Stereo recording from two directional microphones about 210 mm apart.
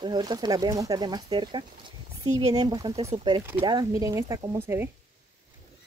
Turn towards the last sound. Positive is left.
turn(degrees=-15)  # may be behind; listen again after turning